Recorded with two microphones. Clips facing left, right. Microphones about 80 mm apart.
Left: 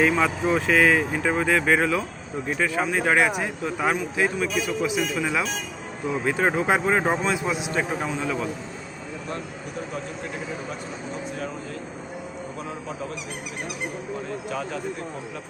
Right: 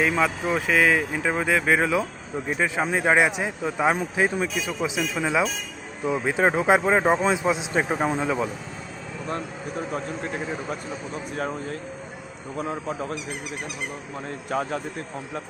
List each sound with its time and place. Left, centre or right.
0.0 s speech: centre; by 8.0 s right
8.2 s speech: centre
14.5 s speech: right